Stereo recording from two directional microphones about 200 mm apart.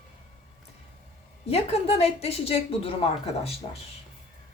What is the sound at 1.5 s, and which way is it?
A woman's voice, 30° left (ahead or behind).